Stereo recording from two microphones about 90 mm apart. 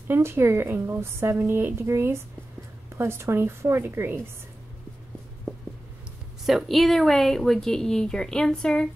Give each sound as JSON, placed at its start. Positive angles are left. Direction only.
{"t": 0.1, "sound": "a woman's voice", "side_deg": -25}
{"t": 5.5, "sound": "a sound", "side_deg": 10}
{"t": 6.4, "sound": "speech", "side_deg": 0}